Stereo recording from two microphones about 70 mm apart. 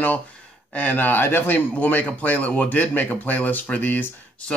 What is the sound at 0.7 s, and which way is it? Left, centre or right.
Speech, left.